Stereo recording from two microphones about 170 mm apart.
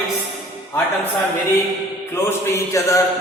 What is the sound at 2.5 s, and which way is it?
Speech, 15° left (ahead or behind).